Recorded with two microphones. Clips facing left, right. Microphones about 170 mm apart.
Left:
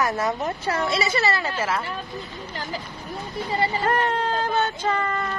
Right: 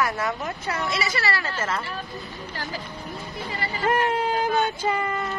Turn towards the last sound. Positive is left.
turn(degrees=-10)  # may be behind; listen again after turning